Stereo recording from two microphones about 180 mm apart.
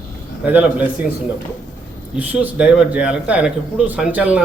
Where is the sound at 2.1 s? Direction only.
10° right (ahead or behind).